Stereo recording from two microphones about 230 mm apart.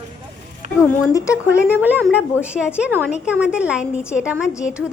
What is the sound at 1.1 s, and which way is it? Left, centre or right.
Speech, centre.